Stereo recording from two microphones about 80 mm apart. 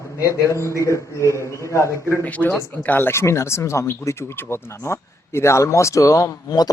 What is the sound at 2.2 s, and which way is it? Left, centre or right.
Speech, centre.